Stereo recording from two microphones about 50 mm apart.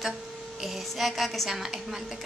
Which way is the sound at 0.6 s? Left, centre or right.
Centre.